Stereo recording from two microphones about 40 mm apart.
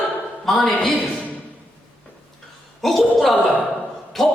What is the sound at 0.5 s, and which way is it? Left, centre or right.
Speech, centre.